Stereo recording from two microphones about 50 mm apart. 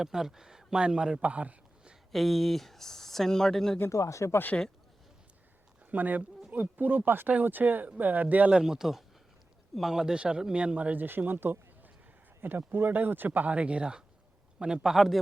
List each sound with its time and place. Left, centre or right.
0.0 s a man's voice: centre
1.2 s a sound: right
2.1 s speech: centre
3.8 s speech: left
5.9 s speech: right
8.4 s a man's voice: centre
10.9 s a man's voice: right; by 15.2 s centre